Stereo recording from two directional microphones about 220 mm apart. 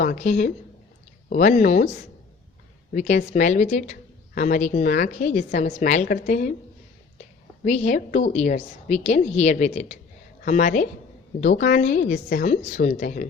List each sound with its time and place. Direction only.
0.0 s a woman's voice: 35° left (ahead or behind)
2.9 s a woman's voice: 35° left (ahead or behind)
7.6 s a woman's voice: 30° left (ahead or behind)
11.4 s a woman's voice: 50° left (ahead or behind)
11.8 s a woman's voice: 35° left (ahead or behind)